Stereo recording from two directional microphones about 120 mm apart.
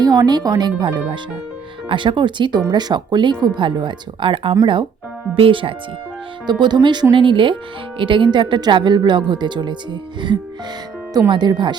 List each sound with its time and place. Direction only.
0.0 s speech: 35° right (ahead or behind)